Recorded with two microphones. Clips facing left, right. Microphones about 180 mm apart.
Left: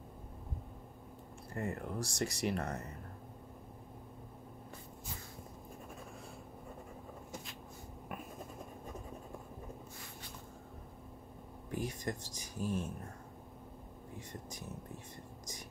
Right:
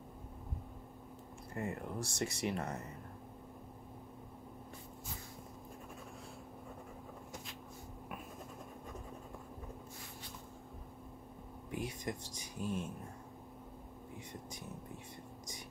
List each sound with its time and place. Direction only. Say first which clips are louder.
1.5 s speech: left 1 dB; 40° left (ahead or behind)
11.8 s speech: left 2 dB; centre (ahead or behind)